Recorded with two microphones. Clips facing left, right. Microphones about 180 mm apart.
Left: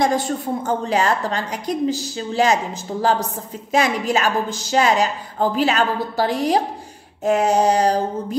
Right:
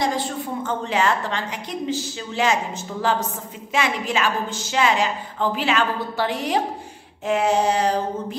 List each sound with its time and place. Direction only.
0.0 s a woman's voice: 45° left (ahead or behind)